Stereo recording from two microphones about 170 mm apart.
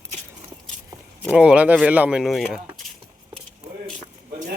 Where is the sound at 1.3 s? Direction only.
5° right (ahead or behind).